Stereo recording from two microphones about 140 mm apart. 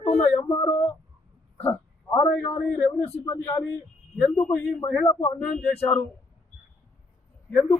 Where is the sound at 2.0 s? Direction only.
25° left (ahead or behind).